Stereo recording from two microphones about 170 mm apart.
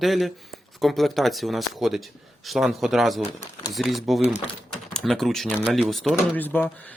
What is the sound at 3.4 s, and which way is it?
Speech, 20° left (ahead or behind).